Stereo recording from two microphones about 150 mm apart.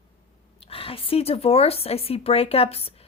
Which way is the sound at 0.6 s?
40° left (ahead or behind).